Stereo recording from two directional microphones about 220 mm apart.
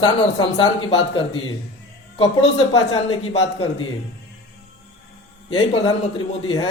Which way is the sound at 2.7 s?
20° left (ahead or behind).